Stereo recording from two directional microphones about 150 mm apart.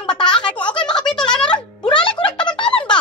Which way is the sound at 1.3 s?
5° left (ahead or behind).